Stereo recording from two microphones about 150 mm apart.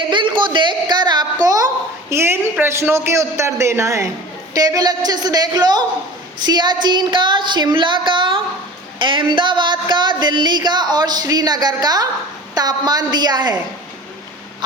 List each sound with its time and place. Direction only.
0.1 s a woman's voice: 35° right (ahead or behind)